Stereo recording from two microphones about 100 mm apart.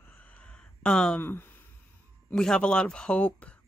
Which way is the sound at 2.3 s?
5° left (ahead or behind).